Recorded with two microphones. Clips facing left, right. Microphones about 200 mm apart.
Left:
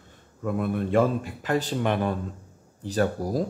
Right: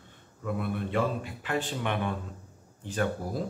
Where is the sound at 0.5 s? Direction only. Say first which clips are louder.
Left 7 dB; 45° left (ahead or behind).